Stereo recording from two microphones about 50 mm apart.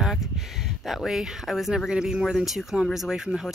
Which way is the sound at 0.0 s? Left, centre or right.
Centre.